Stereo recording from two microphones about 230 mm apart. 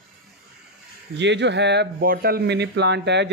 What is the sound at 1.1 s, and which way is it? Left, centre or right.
Speech, right.